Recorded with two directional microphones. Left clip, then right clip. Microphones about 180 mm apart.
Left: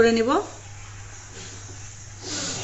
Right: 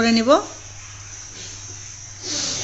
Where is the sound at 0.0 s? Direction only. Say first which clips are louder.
Right 3 dB; 40° right (ahead or behind).